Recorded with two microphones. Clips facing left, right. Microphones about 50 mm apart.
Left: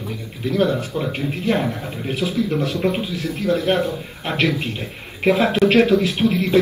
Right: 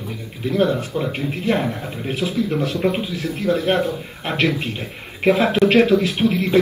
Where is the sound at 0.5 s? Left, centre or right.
Right.